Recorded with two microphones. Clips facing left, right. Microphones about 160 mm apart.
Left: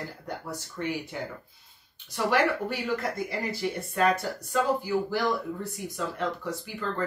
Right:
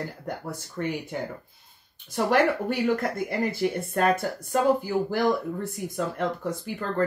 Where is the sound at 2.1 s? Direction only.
50° right (ahead or behind).